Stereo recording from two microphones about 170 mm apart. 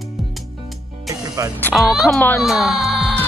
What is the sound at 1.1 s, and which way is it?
Music, 20° right (ahead or behind).